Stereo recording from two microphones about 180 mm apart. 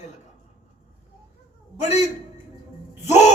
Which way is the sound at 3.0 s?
40° left (ahead or behind).